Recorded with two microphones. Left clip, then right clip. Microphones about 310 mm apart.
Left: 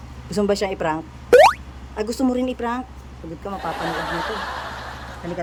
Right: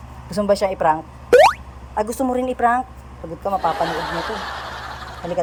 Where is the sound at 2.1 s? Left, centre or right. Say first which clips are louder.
Right 2 dB; centre.